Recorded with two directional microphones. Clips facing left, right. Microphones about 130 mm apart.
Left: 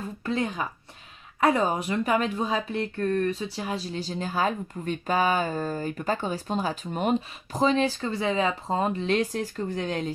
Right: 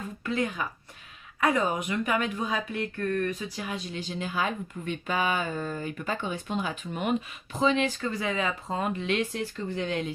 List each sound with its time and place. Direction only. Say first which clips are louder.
0.2 s speech: left 1 dB; 30° left (ahead or behind)